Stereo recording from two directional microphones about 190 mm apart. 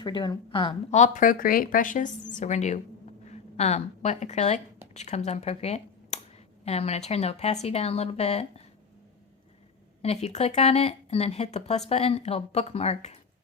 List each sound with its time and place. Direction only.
0.0 s speech: 25° left (ahead or behind)
10.0 s speech: 35° left (ahead or behind)